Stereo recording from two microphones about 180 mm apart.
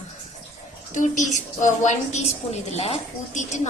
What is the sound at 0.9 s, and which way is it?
A woman's voice, 45° left (ahead or behind).